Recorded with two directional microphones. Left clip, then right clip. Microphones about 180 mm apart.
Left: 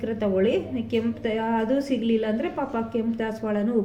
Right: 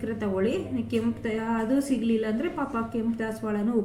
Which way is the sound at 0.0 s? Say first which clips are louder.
Left 5 dB; 20° left (ahead or behind).